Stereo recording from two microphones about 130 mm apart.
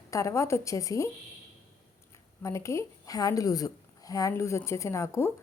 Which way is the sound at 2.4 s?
25° left (ahead or behind).